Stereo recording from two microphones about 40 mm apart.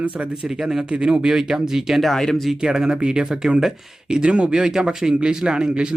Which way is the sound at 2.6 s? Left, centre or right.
Centre.